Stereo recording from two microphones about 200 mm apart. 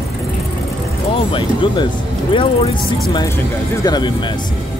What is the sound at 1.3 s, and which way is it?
Speech, 25° left (ahead or behind).